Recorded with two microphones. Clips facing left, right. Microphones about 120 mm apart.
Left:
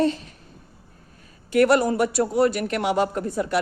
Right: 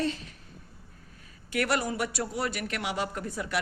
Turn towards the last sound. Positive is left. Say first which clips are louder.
# left 8 dB
turn(degrees=40)  # may be behind; listen again after turning